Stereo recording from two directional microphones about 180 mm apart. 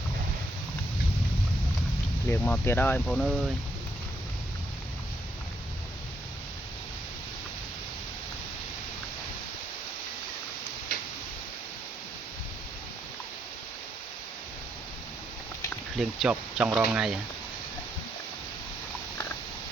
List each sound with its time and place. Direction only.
2.3 s speech: 10° left (ahead or behind)
16.0 s speech: 5° right (ahead or behind)